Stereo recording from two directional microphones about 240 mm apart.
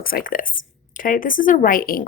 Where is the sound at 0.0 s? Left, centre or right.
Left.